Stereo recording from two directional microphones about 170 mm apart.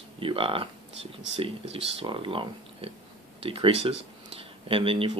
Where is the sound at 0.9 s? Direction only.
90° right.